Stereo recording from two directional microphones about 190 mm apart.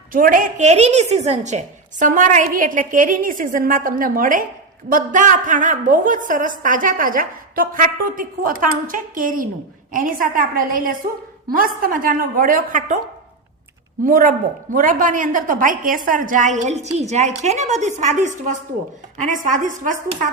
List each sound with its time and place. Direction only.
0.1 s a woman's voice: 45° right (ahead or behind)
14.0 s a woman's voice: 45° right (ahead or behind)